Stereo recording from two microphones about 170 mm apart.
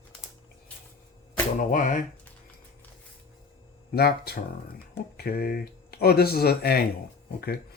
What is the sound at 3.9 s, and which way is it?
Speech, 65° left (ahead or behind).